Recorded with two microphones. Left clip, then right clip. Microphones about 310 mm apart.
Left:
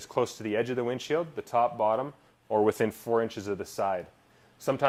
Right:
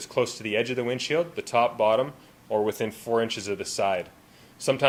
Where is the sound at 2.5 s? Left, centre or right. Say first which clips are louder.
Left 1 dB; left.